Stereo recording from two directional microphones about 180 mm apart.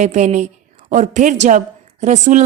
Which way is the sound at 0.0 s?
40° right (ahead or behind).